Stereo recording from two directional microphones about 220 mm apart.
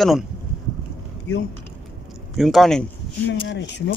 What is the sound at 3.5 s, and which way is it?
Speech, 50° left (ahead or behind).